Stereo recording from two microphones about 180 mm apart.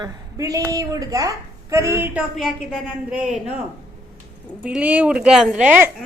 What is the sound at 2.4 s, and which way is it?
A woman's voice, centre (ahead or behind).